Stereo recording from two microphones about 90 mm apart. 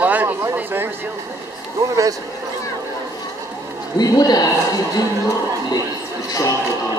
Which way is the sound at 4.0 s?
45° left (ahead or behind).